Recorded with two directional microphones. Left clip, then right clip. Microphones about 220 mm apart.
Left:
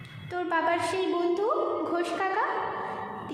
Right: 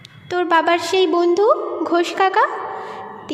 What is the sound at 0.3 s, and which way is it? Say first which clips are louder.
A woman's voice: right 11 dB; 40° right (ahead or behind).